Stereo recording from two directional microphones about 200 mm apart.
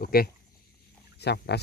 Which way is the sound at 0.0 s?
50° left (ahead or behind).